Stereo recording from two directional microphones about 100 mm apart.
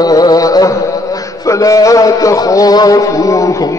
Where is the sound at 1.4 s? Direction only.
35° left (ahead or behind).